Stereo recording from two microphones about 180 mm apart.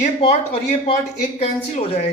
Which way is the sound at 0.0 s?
35° left (ahead or behind).